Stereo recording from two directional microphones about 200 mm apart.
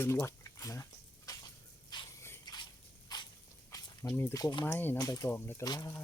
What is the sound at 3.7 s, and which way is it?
Speech, 15° left (ahead or behind).